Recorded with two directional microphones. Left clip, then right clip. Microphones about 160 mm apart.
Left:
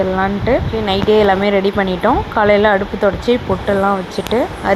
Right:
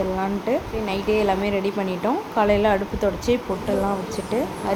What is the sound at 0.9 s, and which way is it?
A woman's voice, 25° left (ahead or behind).